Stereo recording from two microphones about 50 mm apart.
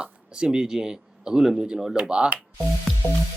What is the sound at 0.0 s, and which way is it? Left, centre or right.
Speech, centre.